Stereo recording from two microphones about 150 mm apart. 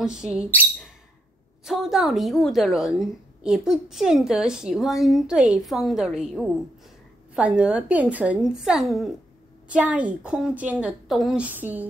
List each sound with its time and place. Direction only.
0.0 s a woman's voice: 5° right (ahead or behind)